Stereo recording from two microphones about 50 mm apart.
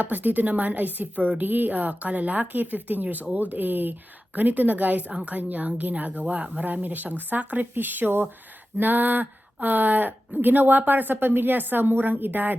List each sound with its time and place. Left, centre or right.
0.0 s speech: right